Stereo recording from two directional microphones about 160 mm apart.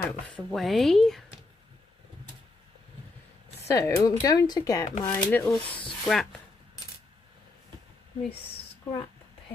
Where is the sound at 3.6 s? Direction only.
20° left (ahead or behind).